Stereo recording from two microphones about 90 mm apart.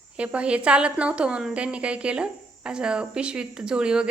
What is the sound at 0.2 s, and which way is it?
A woman's voice, 15° right (ahead or behind).